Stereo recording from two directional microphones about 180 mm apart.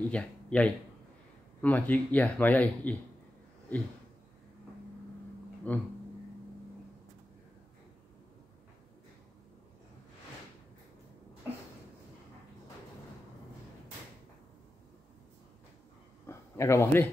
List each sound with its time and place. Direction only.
0.1 s speech: 5° left (ahead or behind)
5.7 s speech: 10° left (ahead or behind)
16.3 s speech: 15° left (ahead or behind)